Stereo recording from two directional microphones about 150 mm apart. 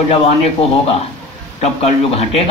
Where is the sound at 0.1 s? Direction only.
40° left (ahead or behind).